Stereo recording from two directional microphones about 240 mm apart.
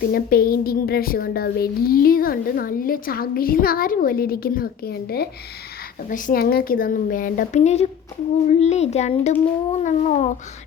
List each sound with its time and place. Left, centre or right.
0.1 s a woman's voice: left